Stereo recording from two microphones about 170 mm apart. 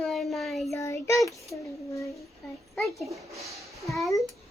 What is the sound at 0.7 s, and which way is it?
Child singing, 15° left (ahead or behind).